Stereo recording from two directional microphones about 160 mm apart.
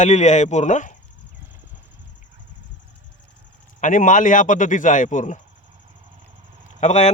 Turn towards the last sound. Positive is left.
turn(degrees=45)  # may be behind; listen again after turning